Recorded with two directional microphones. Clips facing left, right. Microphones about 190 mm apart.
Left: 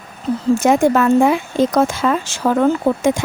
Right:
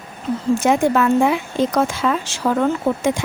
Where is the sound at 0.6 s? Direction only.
45° left (ahead or behind).